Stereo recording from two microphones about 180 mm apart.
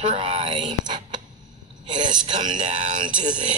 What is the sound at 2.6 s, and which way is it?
Speech, 45° right (ahead or behind).